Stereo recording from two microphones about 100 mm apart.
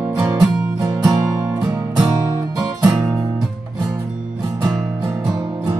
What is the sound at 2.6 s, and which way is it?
Music, 40° right (ahead or behind).